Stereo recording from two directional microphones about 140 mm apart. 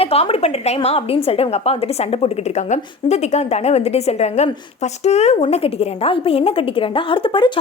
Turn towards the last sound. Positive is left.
turn(degrees=35)  # may be behind; listen again after turning